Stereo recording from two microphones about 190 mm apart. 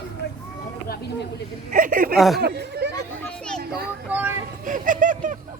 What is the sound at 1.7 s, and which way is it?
Speech, 45° right (ahead or behind).